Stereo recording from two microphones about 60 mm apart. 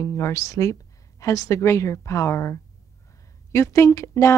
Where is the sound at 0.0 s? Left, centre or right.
Left.